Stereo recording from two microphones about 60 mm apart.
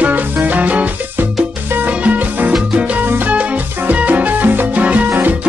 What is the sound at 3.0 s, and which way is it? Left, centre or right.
Salsa music, right.